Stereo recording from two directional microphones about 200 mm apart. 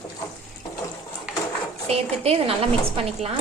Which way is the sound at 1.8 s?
30° right (ahead or behind).